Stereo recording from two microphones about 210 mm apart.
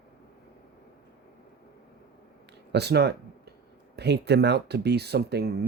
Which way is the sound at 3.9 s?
50° right (ahead or behind).